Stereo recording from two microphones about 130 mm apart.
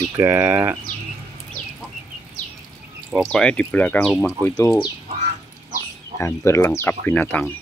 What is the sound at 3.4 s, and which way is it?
Speech, 10° left (ahead or behind).